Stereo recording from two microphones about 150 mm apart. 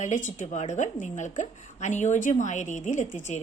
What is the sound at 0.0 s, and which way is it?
A woman's voice, 55° left (ahead or behind).